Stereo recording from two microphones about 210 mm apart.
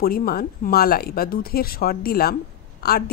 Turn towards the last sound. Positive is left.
turn(degrees=50)  # may be behind; listen again after turning